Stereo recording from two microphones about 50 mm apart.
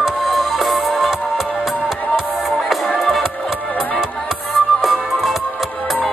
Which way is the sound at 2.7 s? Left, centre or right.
Centre.